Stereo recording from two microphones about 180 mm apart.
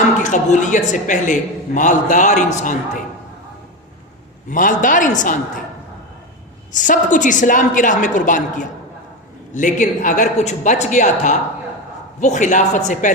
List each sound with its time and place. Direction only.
0.2 s a man's voice: 40° left (ahead or behind)
4.4 s a man's voice: 45° left (ahead or behind)
6.7 s a man's voice: 45° left (ahead or behind)